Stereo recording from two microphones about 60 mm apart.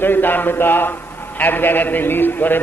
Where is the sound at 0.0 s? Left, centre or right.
Left.